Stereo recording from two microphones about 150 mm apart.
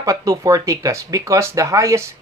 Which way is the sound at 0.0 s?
20° right (ahead or behind).